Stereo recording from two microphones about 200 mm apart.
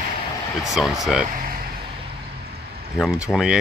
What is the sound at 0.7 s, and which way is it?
Speech, centre (ahead or behind).